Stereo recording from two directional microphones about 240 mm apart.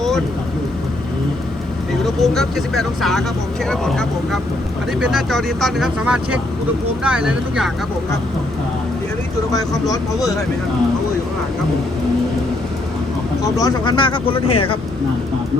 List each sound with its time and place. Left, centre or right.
2.0 s speech: centre
9.5 s speech: centre
13.6 s speech: centre